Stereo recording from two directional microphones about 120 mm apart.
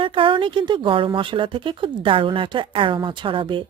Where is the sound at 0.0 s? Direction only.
45° right (ahead or behind).